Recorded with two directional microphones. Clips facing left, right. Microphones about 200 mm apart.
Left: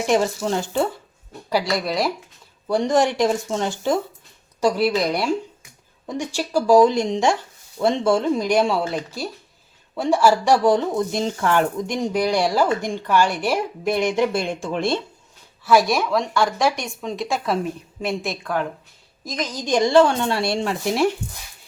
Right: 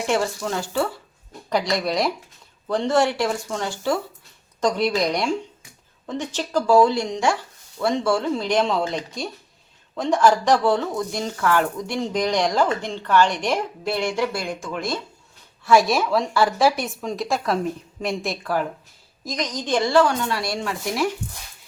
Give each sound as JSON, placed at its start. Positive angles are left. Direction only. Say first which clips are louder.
{"t": 0.0, "sound": "a woman's voice", "louder": "left 3 dB", "side_deg": 15}
{"t": 1.5, "sound": "a woman's voice", "louder": "even", "side_deg": 5}
{"t": 2.6, "sound": "speech", "louder": "left 1 dB", "side_deg": 15}
{"t": 4.6, "sound": "a woman's voice", "louder": "left 2 dB", "side_deg": 5}
{"t": 15.6, "sound": "a woman's voice", "louder": "even", "side_deg": 0}